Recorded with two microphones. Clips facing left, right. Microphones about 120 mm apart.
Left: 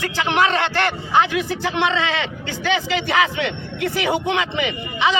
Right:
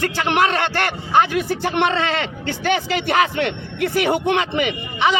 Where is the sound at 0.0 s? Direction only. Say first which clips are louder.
Right 1 dB; 50° right (ahead or behind).